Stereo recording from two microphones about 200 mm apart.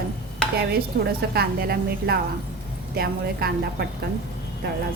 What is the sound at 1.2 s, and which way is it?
A woman's voice, 50° right (ahead or behind).